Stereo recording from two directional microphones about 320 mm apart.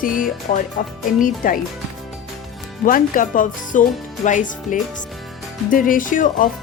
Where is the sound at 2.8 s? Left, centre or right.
Left.